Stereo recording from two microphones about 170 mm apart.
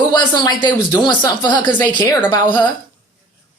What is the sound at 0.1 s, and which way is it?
Speech, 25° left (ahead or behind).